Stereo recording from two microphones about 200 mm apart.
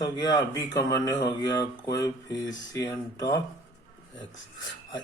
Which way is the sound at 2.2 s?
20° left (ahead or behind).